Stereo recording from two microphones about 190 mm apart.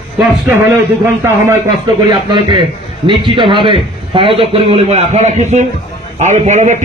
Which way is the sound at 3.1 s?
25° right (ahead or behind).